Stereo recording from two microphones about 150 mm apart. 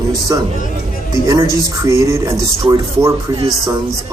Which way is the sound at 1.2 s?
25° right (ahead or behind).